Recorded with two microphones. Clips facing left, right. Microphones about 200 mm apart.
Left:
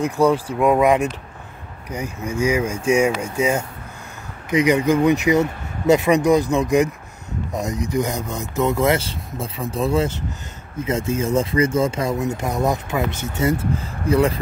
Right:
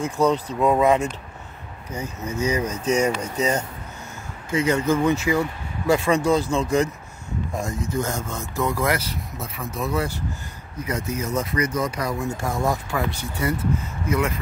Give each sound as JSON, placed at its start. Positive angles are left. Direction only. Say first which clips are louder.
{"t": 0.0, "sound": "speech", "louder": "left 3 dB", "side_deg": 10}